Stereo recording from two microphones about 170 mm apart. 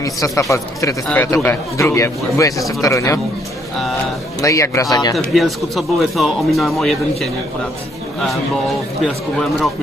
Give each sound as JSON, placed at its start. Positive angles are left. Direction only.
{"t": 0.0, "sound": "a man's voice", "side_deg": 20}
{"t": 4.4, "sound": "a man's voice", "side_deg": 20}
{"t": 5.1, "sound": "speech", "side_deg": 0}
{"t": 9.0, "sound": "speech", "side_deg": 0}